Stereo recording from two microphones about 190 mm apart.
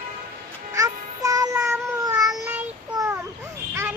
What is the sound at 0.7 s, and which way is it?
Music, 20° right (ahead or behind).